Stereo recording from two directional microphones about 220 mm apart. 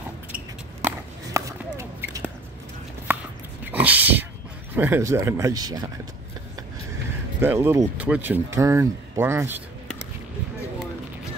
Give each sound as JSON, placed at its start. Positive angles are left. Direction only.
{"t": 0.8, "sound": "a sound", "side_deg": -10}
{"t": 3.1, "sound": "chopping", "side_deg": -10}
{"t": 3.6, "sound": "dog", "side_deg": -5}
{"t": 4.7, "sound": "speech", "side_deg": -10}
{"t": 7.3, "sound": "speech", "side_deg": -10}